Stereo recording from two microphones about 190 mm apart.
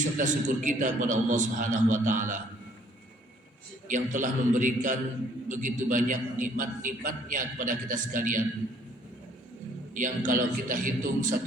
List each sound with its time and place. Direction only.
0.0 s a man's voice: 40° right (ahead or behind)
3.8 s a man's voice: 40° right (ahead or behind)
9.9 s a man's voice: 45° right (ahead or behind)